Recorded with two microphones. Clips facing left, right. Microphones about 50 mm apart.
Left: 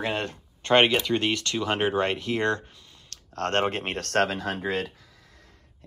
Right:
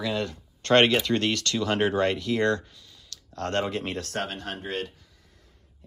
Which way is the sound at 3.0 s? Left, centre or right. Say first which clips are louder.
Left 3 dB; left.